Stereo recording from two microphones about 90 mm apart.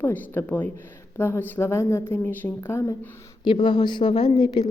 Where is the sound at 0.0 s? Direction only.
25° left (ahead or behind).